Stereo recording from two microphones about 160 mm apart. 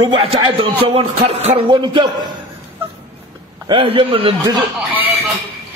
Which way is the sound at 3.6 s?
30° right (ahead or behind).